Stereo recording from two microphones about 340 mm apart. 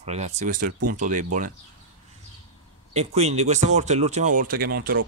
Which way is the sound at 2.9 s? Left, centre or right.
Centre.